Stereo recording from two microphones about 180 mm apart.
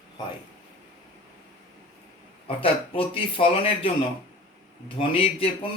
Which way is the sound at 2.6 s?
30° left (ahead or behind).